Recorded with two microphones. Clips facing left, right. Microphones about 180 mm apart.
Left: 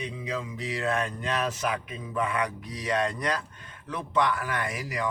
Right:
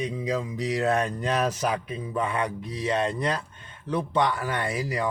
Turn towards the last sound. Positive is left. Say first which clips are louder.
# right 4 dB
turn(degrees=-30)  # may be behind; listen again after turning